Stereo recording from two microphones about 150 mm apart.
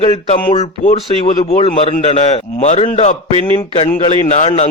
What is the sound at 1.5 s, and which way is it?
A man's voice, 45° left (ahead or behind).